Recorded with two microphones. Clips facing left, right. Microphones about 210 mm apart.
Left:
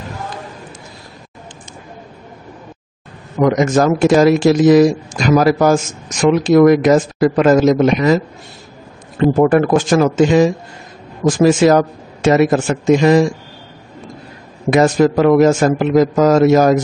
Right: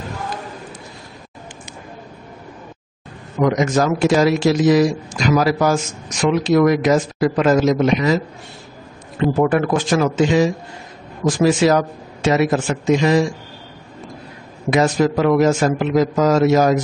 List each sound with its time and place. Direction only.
3.4 s speech: 50° left (ahead or behind)
9.2 s speech: 45° left (ahead or behind)
14.7 s speech: 50° left (ahead or behind)